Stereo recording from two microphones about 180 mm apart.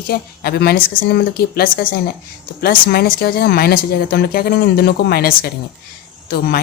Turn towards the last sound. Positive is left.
turn(degrees=55)  # may be behind; listen again after turning